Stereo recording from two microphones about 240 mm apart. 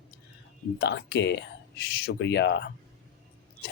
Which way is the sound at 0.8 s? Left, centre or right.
Left.